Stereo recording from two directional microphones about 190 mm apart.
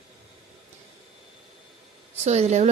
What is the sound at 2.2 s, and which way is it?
Speech, 35° right (ahead or behind).